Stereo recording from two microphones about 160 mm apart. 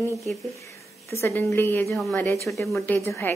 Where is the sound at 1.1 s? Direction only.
15° left (ahead or behind).